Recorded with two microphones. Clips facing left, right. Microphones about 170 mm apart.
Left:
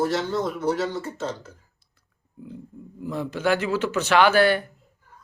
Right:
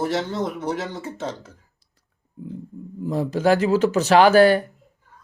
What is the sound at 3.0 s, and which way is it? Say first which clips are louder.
Speech: right 5 dB; 35° right (ahead or behind).